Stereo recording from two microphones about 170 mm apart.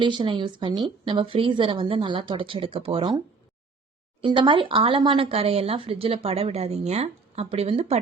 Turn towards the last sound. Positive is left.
turn(degrees=-35)  # may be behind; listen again after turning